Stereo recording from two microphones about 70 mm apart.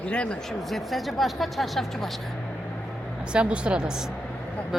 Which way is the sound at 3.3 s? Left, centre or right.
Centre.